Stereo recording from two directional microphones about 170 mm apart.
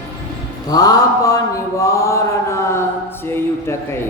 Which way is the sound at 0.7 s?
20° left (ahead or behind).